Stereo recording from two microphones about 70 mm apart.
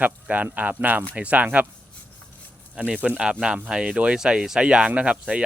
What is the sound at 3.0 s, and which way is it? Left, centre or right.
Speech, centre.